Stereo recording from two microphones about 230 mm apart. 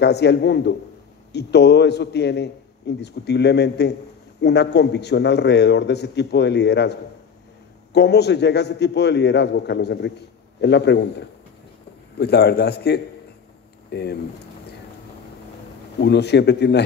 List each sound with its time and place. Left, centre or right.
0.0 s a man's voice: left
16.0 s a man's voice: left